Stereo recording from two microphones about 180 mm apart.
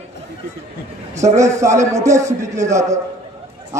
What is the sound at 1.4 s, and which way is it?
A man's voice, 15° right (ahead or behind).